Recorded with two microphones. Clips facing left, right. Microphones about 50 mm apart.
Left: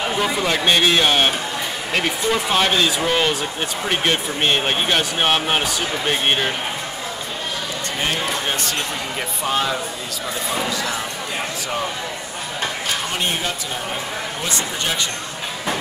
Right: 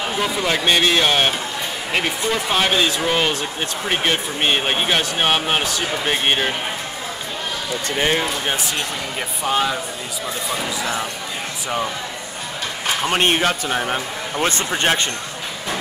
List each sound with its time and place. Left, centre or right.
0.2 s speech: centre
8.5 s speech: centre
13.1 s speech: right
14.5 s speech: right